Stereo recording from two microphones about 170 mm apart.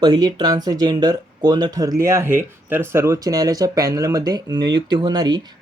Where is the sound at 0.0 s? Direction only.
25° right (ahead or behind).